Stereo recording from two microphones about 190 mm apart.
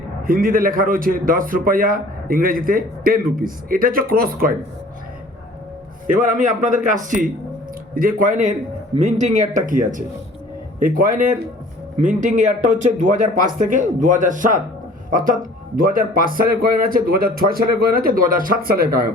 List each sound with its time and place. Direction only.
0.3 s a man's voice: 50° right (ahead or behind)
6.1 s a man's voice: 40° right (ahead or behind)